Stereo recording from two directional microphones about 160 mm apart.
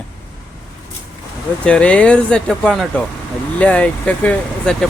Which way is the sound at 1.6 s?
5° left (ahead or behind).